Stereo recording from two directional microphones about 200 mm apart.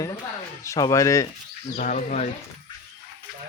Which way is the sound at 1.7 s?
40° left (ahead or behind).